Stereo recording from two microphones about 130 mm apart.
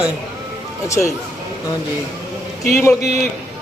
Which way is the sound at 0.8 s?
25° left (ahead or behind).